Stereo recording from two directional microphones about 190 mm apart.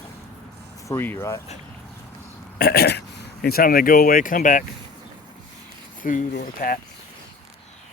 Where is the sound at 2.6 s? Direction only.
55° left (ahead or behind).